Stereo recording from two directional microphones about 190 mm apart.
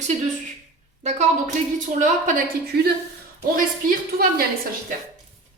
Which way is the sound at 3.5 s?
50° right (ahead or behind).